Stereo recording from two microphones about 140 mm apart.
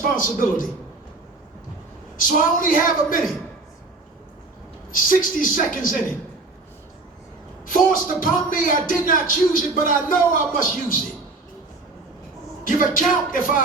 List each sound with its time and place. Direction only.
0.2 s a man's voice: 75° left (ahead or behind)
2.1 s a woman's voice: 80° left
4.9 s a man's voice: 75° left (ahead or behind)
7.6 s a man's voice: 80° left
12.6 s a man's voice: 75° left (ahead or behind)